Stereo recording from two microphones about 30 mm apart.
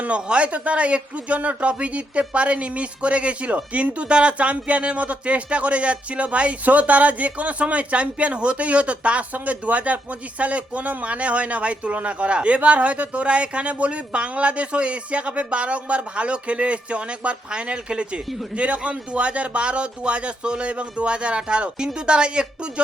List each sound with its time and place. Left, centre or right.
0.3 s speech: right
6.7 s speech: right
9.3 s a man's voice: right